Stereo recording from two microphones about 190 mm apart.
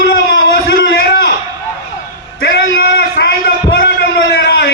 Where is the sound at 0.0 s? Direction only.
55° left (ahead or behind).